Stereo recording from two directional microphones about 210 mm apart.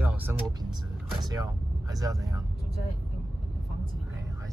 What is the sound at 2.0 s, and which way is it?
Speech, 15° right (ahead or behind).